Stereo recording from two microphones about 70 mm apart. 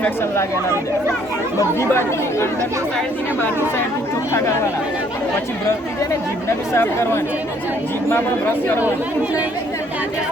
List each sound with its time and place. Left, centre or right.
1.9 s speech: left
4.3 s speech: left
6.7 s speech: left